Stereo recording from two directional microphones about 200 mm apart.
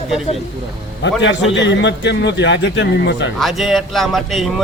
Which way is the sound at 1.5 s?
60° left (ahead or behind).